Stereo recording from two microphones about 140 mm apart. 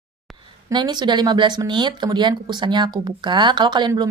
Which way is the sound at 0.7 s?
30° right (ahead or behind).